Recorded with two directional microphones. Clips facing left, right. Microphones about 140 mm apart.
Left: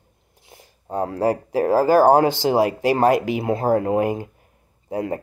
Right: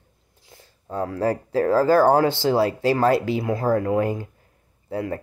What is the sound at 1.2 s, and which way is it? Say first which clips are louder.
Speech: left 1 dB; 15° left (ahead or behind).